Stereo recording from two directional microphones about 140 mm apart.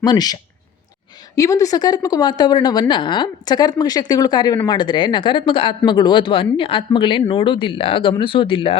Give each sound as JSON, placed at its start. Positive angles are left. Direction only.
{"t": 0.0, "sound": "speech", "side_deg": 30}
{"t": 1.4, "sound": "a woman's voice", "side_deg": 25}